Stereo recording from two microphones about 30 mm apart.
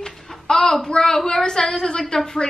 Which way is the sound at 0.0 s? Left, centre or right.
Left.